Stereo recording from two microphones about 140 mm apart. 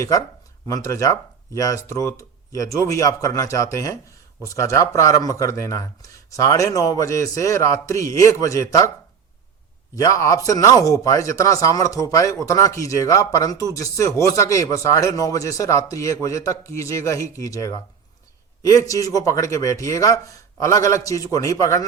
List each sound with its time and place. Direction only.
0.0 s speech: 25° left (ahead or behind)
9.9 s speech: 25° left (ahead or behind)